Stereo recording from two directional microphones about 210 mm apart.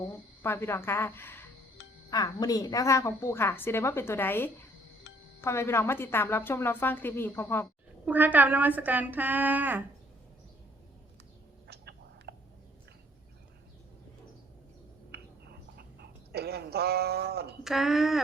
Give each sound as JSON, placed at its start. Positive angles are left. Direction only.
{"t": 0.4, "sound": "a woman's voice", "side_deg": 10}
{"t": 5.1, "sound": "music", "side_deg": 50}
{"t": 5.4, "sound": "a woman's voice", "side_deg": 10}
{"t": 8.0, "sound": "speech", "side_deg": -10}
{"t": 11.7, "sound": "whispering", "side_deg": -50}
{"t": 15.1, "sound": "a sound", "side_deg": -50}
{"t": 17.6, "sound": "speech", "side_deg": 0}